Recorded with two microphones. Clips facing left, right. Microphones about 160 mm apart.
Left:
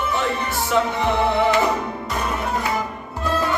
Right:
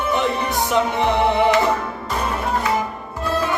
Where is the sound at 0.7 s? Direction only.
20° right (ahead or behind).